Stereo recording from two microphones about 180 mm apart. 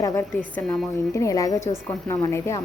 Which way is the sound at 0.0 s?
10° left (ahead or behind).